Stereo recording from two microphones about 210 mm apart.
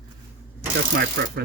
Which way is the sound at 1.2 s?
50° right (ahead or behind).